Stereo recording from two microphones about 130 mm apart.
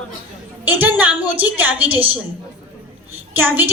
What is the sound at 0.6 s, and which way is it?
A woman's voice, 15° right (ahead or behind).